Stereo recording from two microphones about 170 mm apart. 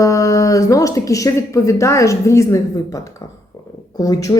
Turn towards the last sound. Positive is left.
turn(degrees=20)  # may be behind; listen again after turning